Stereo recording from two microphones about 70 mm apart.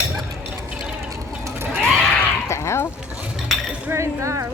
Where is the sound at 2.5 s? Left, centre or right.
Left.